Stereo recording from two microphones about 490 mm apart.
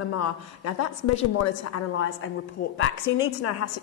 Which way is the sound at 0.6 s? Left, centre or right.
Left.